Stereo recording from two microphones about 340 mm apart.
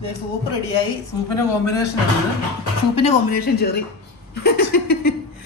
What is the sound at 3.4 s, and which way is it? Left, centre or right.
Speech, left.